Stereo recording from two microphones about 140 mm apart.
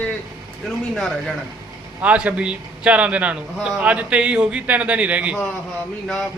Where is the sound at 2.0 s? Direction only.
10° right (ahead or behind).